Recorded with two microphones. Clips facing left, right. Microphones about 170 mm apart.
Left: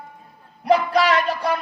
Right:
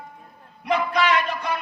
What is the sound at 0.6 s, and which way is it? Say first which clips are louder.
Speech: left 4 dB; 35° left (ahead or behind).